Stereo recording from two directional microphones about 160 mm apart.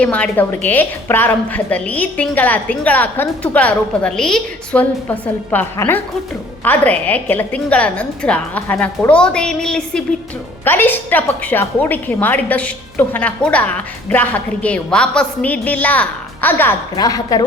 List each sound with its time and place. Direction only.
0.0 s a woman's voice: 10° left (ahead or behind)
16.9 s a woman's voice: 25° left (ahead or behind)